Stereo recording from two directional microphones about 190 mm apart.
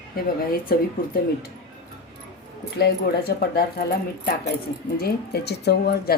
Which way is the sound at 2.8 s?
55° left (ahead or behind).